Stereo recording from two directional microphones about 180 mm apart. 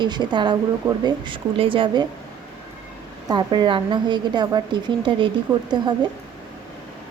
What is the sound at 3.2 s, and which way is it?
A woman's voice, 25° right (ahead or behind).